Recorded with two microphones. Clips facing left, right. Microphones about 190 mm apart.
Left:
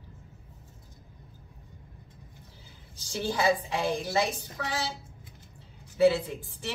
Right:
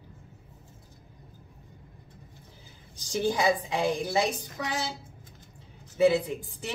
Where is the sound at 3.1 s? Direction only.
15° right (ahead or behind).